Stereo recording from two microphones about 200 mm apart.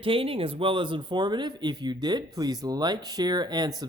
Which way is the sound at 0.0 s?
25° right (ahead or behind).